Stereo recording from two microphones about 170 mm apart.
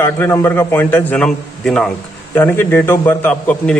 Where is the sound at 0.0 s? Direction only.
15° left (ahead or behind).